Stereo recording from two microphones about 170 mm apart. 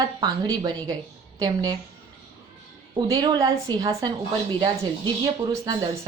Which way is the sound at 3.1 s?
20° right (ahead or behind).